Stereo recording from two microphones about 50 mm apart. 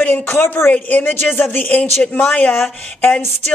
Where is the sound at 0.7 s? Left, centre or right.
Left.